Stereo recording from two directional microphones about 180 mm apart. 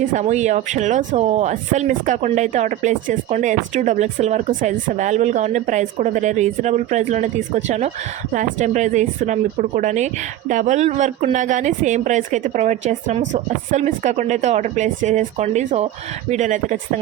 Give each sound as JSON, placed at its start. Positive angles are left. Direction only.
{"t": 0.1, "sound": "speech", "side_deg": -40}